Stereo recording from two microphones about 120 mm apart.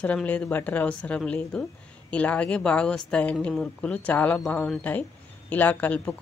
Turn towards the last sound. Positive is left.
turn(degrees=15)  # may be behind; listen again after turning